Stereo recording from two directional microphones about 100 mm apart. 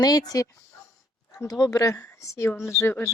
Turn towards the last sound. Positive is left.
turn(degrees=25)  # may be behind; listen again after turning